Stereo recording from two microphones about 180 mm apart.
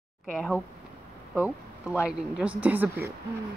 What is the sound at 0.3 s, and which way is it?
A woman's voice, centre (ahead or behind).